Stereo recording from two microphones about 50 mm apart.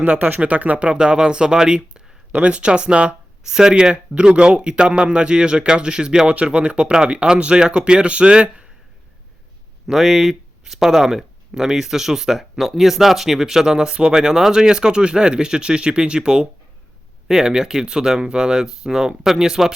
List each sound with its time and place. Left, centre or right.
0.0 s speech: right
9.8 s speech: centre